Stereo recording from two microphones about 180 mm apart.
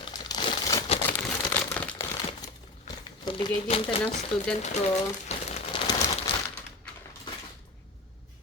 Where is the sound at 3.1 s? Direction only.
25° left (ahead or behind).